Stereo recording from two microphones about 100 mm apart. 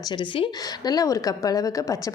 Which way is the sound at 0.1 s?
55° left (ahead or behind).